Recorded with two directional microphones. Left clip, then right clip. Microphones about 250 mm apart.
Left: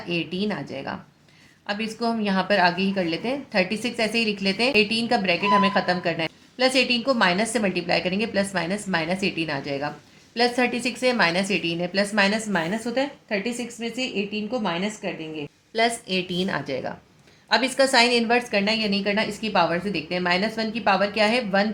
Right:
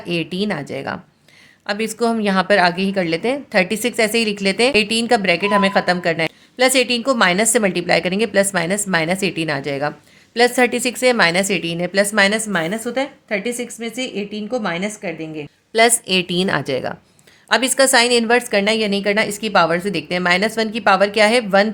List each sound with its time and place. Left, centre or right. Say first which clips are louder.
0.1 s a woman's voice: right 5 dB; right